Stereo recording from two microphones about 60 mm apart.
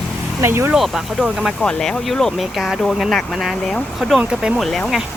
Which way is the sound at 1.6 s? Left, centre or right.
Centre.